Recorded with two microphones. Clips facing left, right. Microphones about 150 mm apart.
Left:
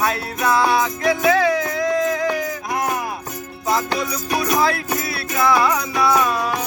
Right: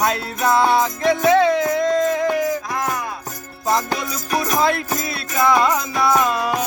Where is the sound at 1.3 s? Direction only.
25° right (ahead or behind).